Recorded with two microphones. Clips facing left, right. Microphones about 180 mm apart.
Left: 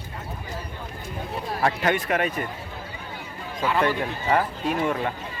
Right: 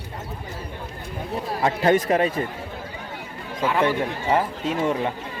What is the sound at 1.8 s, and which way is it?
Speech, 35° right (ahead or behind).